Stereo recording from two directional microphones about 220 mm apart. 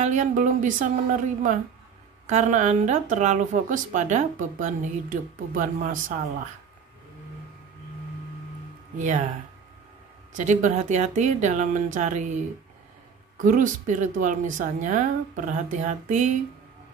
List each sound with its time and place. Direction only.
0.0 s a woman's voice: 35° right (ahead or behind)
8.9 s a woman's voice: 35° right (ahead or behind)
10.3 s a woman's voice: 35° right (ahead or behind)
13.4 s a woman's voice: 35° right (ahead or behind)